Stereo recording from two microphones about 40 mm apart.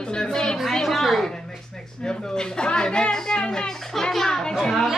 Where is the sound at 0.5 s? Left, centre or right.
Centre.